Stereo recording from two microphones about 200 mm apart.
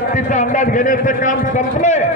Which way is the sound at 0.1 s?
40° left (ahead or behind).